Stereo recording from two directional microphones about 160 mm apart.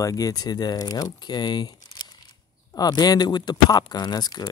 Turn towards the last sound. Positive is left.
turn(degrees=25)  # may be behind; listen again after turning